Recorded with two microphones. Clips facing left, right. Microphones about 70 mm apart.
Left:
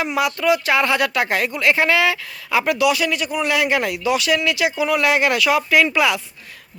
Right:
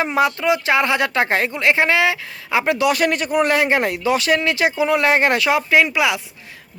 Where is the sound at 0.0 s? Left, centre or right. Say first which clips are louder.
Right 2 dB; right.